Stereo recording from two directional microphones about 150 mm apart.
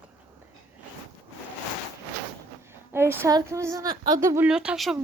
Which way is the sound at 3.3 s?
20° right (ahead or behind).